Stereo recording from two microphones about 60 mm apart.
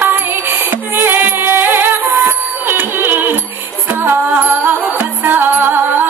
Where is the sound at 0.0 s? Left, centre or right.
Right.